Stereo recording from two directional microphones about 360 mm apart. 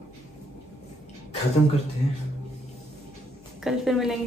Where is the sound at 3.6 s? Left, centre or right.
Centre.